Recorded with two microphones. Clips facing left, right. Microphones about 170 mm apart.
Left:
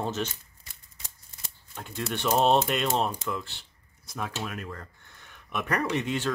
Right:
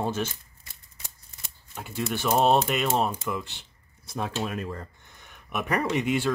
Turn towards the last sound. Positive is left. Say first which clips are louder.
# right 3 dB
turn(degrees=-10)  # may be behind; listen again after turning